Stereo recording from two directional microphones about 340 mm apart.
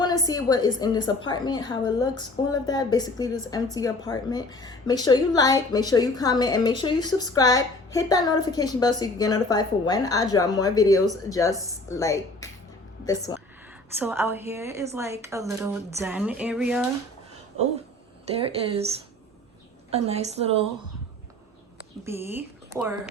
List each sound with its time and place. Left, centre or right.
0.0 s a woman's voice: centre
14.0 s a woman's voice: centre
18.3 s a woman's voice: centre
19.9 s a woman's voice: centre
22.0 s speech: centre